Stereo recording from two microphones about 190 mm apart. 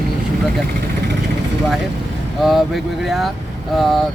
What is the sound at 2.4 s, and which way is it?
Speech, centre (ahead or behind).